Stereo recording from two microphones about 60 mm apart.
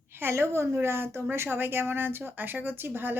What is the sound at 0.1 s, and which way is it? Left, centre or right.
A woman's voice, right.